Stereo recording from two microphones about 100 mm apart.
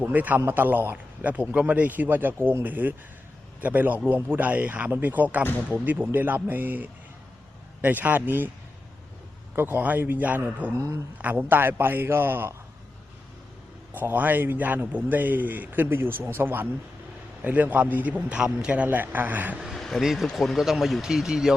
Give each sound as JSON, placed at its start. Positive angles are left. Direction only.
{"t": 0.0, "sound": "a man's voice", "side_deg": -15}
{"t": 9.6, "sound": "a man's voice", "side_deg": -20}
{"t": 13.9, "sound": "a man's voice", "side_deg": -20}
{"t": 19.6, "sound": "speech", "side_deg": 0}